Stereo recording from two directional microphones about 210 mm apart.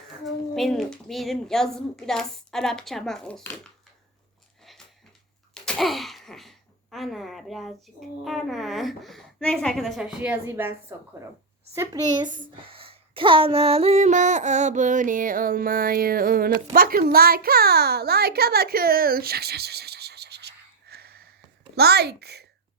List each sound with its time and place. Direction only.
0.3 s a woman's voice: centre (ahead or behind)
4.6 s a sound: centre (ahead or behind)
8.2 s a woman's voice: centre (ahead or behind); by 22.4 s 50° right (ahead or behind)